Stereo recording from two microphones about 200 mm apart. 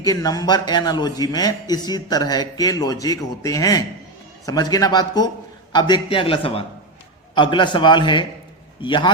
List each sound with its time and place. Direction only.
0.0 s a man's voice: 20° left (ahead or behind)